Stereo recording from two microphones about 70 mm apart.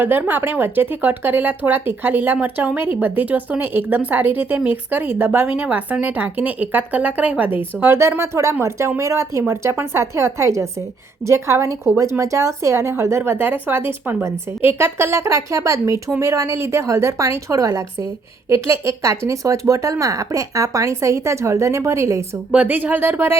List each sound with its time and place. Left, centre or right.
0.0 s a woman's voice: right
22.5 s speech: right